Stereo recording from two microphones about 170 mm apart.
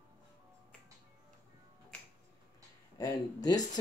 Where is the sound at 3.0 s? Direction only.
20° left (ahead or behind).